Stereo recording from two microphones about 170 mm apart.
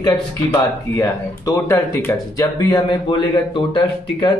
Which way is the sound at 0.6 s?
20° left (ahead or behind).